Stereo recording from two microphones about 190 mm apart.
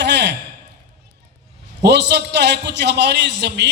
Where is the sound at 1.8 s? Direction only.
65° right (ahead or behind).